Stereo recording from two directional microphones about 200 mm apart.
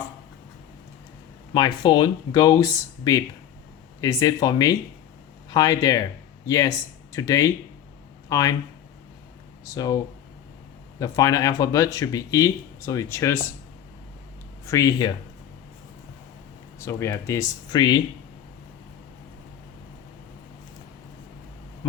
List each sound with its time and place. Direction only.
1.5 s speech: 20° left (ahead or behind)
9.7 s speech: 20° left (ahead or behind)
11.0 s speech: 15° left (ahead or behind)
14.7 s speech: 15° left (ahead or behind)
16.8 s speech: 15° left (ahead or behind)